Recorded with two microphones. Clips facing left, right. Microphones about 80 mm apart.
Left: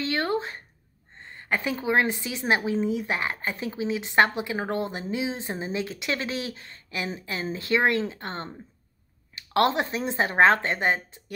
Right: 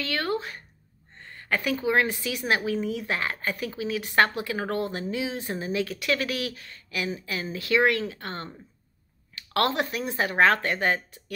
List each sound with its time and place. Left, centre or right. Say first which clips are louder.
0.0 s a woman's voice: left 2 dB; left